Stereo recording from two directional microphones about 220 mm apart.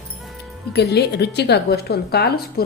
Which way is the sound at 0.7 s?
50° left (ahead or behind).